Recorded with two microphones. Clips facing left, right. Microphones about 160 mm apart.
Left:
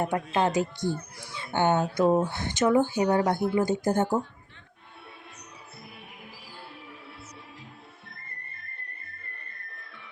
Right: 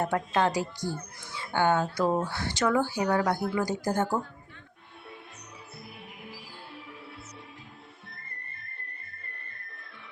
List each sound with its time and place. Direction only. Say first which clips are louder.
0.0 s speech: left 1 dB; 15° left (ahead or behind)